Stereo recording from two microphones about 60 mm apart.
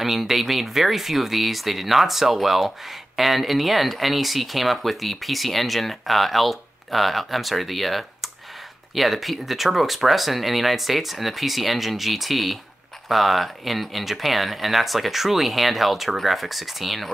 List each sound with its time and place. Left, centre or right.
0.0 s speech: centre